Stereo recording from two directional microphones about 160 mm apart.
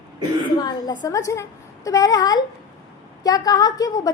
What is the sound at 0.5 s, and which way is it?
A woman's voice, 25° left (ahead or behind).